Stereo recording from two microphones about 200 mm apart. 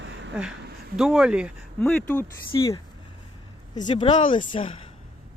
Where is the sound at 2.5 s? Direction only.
20° left (ahead or behind).